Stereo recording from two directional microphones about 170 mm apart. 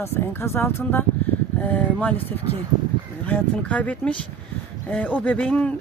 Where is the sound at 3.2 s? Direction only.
10° left (ahead or behind).